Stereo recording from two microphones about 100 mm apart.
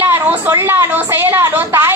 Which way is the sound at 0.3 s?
20° right (ahead or behind).